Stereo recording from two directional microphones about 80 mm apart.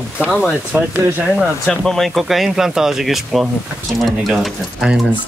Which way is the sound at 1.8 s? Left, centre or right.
Centre.